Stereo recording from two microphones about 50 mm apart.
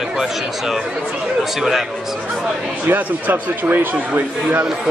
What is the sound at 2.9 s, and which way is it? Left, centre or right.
A man's voice, right.